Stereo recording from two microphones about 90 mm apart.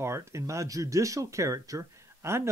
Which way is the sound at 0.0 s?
30° right (ahead or behind).